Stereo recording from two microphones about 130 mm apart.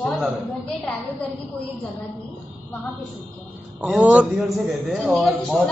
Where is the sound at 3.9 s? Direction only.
10° right (ahead or behind).